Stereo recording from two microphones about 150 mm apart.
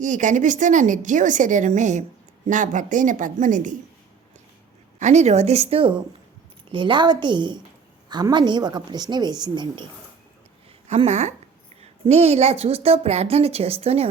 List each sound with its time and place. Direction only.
0.0 s speech: 55° right (ahead or behind)
4.9 s a woman's voice: 50° right (ahead or behind); by 9.8 s 30° right (ahead or behind)
10.8 s a woman's voice: 45° right (ahead or behind)